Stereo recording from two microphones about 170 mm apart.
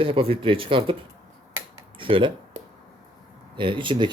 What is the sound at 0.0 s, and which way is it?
Speech, 35° right (ahead or behind).